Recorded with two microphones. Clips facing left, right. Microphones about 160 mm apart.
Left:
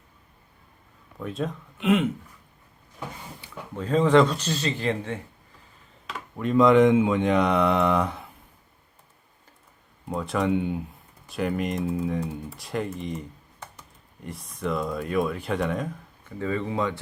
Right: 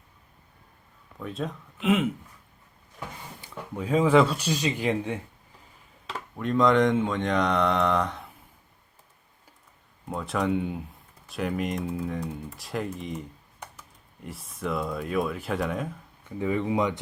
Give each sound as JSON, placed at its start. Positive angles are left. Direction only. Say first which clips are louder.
{"t": 1.2, "sound": "speech", "louder": "left 3 dB", "side_deg": 0}
{"t": 3.8, "sound": "speech", "louder": "left 1 dB", "side_deg": -10}
{"t": 6.3, "sound": "speech", "louder": "left 4 dB", "side_deg": 5}
{"t": 10.1, "sound": "speech", "louder": "left 2 dB", "side_deg": 0}
{"t": 16.4, "sound": "speech", "louder": "right 1 dB", "side_deg": -15}